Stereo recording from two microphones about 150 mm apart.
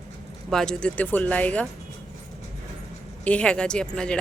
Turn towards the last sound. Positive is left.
turn(degrees=5)  # may be behind; listen again after turning